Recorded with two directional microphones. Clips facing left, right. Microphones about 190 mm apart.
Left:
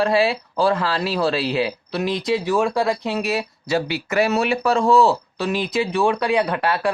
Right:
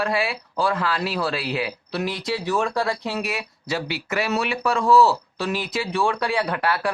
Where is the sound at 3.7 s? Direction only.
45° left (ahead or behind).